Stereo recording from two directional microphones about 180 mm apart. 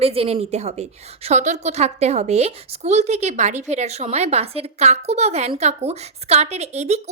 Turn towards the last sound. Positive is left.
turn(degrees=-40)  # may be behind; listen again after turning